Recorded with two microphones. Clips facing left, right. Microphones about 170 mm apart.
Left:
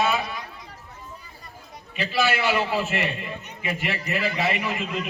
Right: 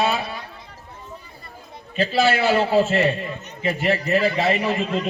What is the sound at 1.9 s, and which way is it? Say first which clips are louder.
A man's voice: right 5 dB; 40° right (ahead or behind).